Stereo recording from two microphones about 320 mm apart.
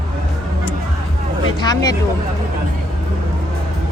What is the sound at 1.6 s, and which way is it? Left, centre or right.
Speech, centre.